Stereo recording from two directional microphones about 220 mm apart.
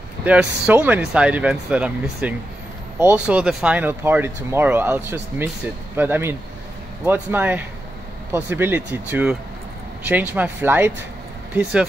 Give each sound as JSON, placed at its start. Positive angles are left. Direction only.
{"t": 0.2, "sound": "speech", "side_deg": -5}